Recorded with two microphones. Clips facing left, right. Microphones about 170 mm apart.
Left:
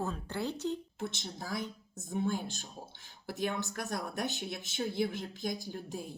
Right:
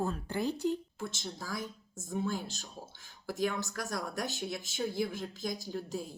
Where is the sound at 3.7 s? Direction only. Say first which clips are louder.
Even; 20° left (ahead or behind).